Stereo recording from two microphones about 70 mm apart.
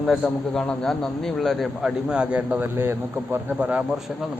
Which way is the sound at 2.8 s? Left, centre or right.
Right.